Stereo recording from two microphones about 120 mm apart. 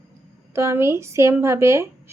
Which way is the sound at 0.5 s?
20° right (ahead or behind).